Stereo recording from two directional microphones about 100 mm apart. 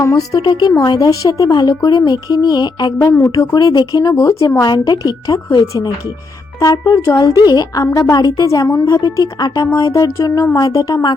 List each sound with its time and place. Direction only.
0.0 s speech: 30° left (ahead or behind)
0.4 s a woman's voice: 50° left (ahead or behind)
3.1 s a woman's voice: 30° left (ahead or behind)
3.5 s speech: 40° left (ahead or behind)
4.5 s speech: 45° left (ahead or behind)
8.6 s speech: 25° left (ahead or behind)